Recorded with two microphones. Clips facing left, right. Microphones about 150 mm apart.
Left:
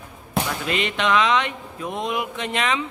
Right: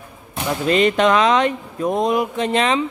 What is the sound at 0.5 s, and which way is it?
Speech, 40° right (ahead or behind).